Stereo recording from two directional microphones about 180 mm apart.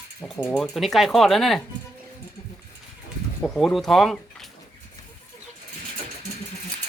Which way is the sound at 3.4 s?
5° left (ahead or behind).